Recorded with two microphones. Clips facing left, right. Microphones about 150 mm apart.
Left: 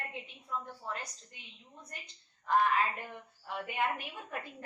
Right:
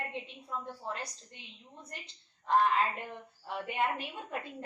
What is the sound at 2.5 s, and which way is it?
A woman's voice, 20° right (ahead or behind).